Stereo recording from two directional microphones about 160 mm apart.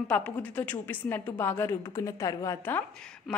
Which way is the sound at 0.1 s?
10° left (ahead or behind).